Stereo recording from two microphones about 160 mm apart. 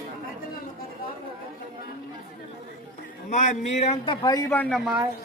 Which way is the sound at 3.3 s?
50° left (ahead or behind).